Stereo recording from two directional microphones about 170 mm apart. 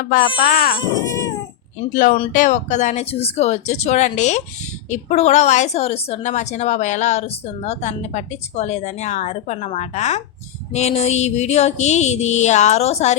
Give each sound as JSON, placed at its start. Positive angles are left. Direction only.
{"t": 0.0, "sound": "speech", "side_deg": 55}
{"t": 0.8, "sound": "dog", "side_deg": 20}
{"t": 1.9, "sound": "a woman's voice", "side_deg": 50}